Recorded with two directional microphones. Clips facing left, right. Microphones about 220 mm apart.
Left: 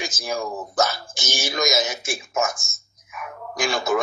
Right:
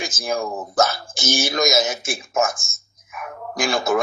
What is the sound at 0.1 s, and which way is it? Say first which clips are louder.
A man's voice: right 3 dB; 50° right (ahead or behind).